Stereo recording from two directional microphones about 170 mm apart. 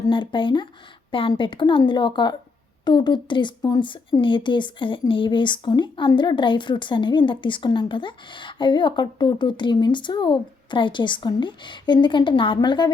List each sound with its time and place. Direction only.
0.0 s speech: 30° left (ahead or behind)